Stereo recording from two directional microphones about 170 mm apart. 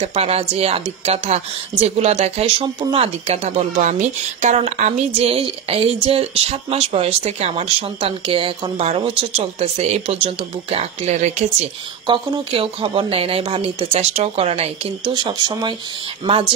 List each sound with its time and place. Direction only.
0.0 s a woman's voice: 35° right (ahead or behind)
12.1 s a woman's voice: 30° right (ahead or behind)